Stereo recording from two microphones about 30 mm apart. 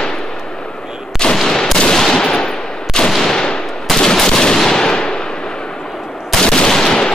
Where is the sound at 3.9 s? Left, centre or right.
Centre.